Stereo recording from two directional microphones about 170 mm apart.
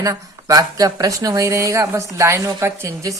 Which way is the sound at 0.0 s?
20° right (ahead or behind).